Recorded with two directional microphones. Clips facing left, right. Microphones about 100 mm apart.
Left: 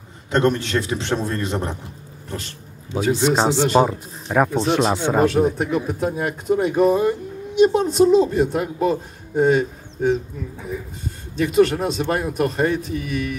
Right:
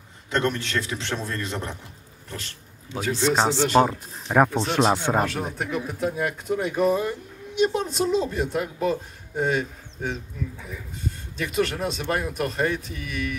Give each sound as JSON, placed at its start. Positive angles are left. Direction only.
{"t": 0.3, "sound": "a man's voice", "side_deg": 25}
{"t": 4.3, "sound": "speech", "side_deg": 0}
{"t": 5.6, "sound": "a man's voice", "side_deg": 30}